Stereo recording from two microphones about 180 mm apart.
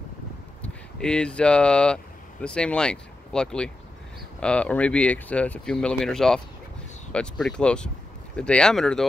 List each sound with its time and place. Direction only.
0.6 s speech: 5° left (ahead or behind)